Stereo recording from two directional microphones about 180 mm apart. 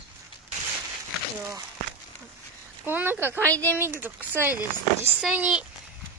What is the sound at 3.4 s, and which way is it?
Speech, 10° left (ahead or behind).